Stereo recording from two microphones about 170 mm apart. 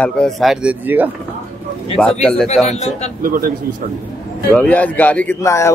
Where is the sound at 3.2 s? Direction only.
55° right (ahead or behind).